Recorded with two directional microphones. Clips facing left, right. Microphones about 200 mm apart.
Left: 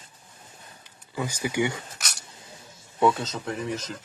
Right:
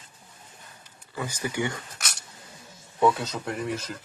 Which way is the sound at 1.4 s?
15° left (ahead or behind).